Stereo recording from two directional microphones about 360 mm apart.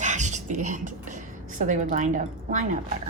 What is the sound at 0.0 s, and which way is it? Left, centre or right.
A woman's voice, centre.